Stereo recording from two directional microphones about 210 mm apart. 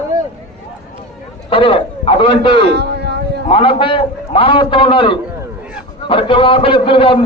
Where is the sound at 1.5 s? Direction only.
25° left (ahead or behind).